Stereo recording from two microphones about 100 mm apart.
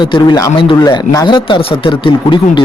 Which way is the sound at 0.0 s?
45° left (ahead or behind).